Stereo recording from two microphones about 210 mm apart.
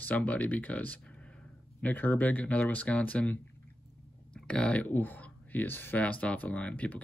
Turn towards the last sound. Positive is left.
turn(degrees=5)  # may be behind; listen again after turning